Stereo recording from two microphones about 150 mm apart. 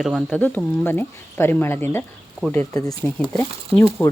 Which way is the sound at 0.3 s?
15° left (ahead or behind).